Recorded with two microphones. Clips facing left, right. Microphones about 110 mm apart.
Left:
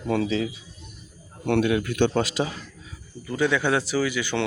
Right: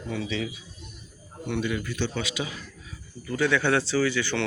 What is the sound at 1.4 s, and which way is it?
Speech, 60° left (ahead or behind).